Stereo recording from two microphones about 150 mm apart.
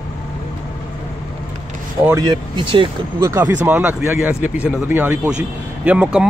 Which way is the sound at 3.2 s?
15° right (ahead or behind).